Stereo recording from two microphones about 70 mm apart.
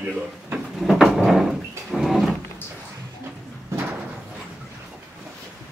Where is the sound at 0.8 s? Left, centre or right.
Centre.